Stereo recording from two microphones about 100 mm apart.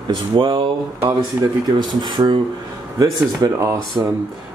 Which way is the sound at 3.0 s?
35° right (ahead or behind).